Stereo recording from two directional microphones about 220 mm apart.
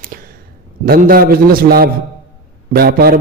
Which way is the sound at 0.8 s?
40° right (ahead or behind).